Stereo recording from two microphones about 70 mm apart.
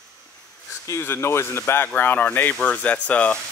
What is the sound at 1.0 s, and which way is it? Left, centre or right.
Speech, left.